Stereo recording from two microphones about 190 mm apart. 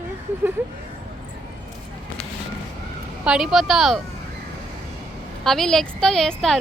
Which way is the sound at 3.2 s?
5° right (ahead or behind).